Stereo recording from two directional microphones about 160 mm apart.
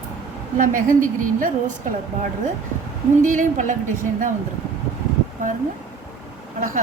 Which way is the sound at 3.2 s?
55° right (ahead or behind).